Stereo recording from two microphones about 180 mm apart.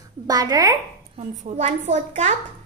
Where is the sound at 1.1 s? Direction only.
40° right (ahead or behind).